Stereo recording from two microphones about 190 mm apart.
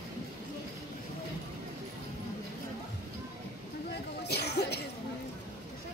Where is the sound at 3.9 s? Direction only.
60° left (ahead or behind).